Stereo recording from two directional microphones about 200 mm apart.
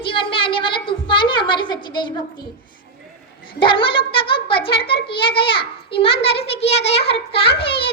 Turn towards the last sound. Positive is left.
turn(degrees=25)  # may be behind; listen again after turning